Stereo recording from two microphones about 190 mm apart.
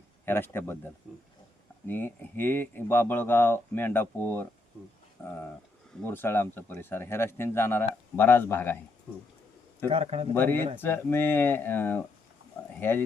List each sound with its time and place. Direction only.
0.3 s speech: 10° left (ahead or behind)
1.9 s speech: 10° left (ahead or behind)
6.0 s speech: 10° left (ahead or behind)
9.9 s a man's voice: 35° right (ahead or behind)
10.3 s speech: 10° left (ahead or behind)